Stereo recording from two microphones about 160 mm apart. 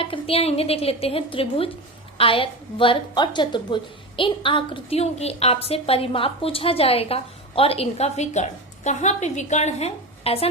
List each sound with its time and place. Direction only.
0.0 s a woman's voice: 35° left (ahead or behind)